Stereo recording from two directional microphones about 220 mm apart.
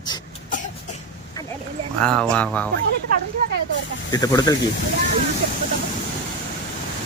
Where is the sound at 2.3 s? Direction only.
5° left (ahead or behind).